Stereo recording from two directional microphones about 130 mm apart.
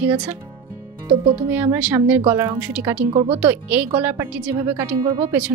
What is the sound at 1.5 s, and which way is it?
A woman's voice, 10° right (ahead or behind).